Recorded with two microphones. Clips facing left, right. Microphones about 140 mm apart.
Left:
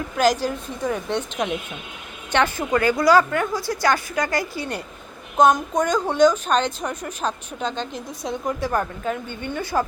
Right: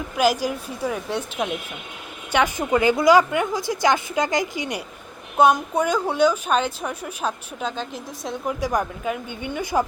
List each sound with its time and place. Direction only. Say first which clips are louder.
0.2 s speech: left 1 dB; 10° right (ahead or behind)